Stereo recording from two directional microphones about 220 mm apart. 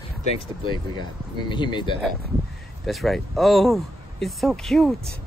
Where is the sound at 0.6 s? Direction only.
20° left (ahead or behind).